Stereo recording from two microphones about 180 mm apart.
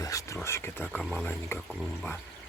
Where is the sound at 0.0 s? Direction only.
20° left (ahead or behind).